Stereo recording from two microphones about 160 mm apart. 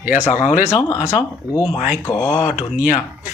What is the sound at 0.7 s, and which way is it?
Speech, 20° left (ahead or behind).